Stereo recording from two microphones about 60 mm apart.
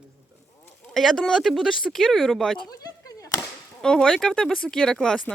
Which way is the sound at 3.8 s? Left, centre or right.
Centre.